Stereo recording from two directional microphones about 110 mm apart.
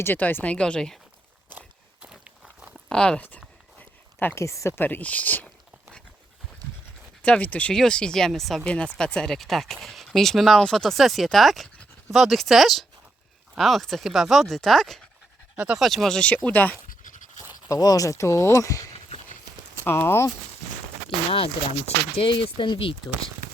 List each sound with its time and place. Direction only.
0.0 s speech: 20° left (ahead or behind)
1.5 s biting: 10° right (ahead or behind)
2.9 s a sound: 10° left (ahead or behind)
4.4 s speech: 25° left (ahead or behind)
7.2 s speech: 10° left (ahead or behind)
17.7 s speech: 35° left (ahead or behind)
21.2 s speech: 60° left (ahead or behind)